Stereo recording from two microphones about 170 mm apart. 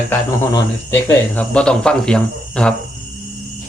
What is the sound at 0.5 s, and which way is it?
Speech, 15° left (ahead or behind).